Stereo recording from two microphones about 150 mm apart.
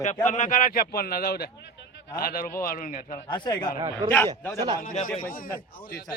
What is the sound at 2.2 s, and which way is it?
Speech, 75° left (ahead or behind).